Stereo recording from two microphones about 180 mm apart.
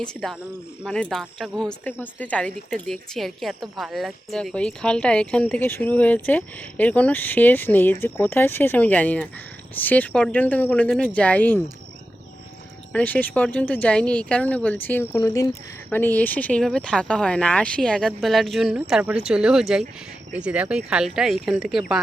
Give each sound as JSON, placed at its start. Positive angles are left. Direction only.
{"t": 0.0, "sound": "speech", "side_deg": 5}
{"t": 12.9, "sound": "speech", "side_deg": 10}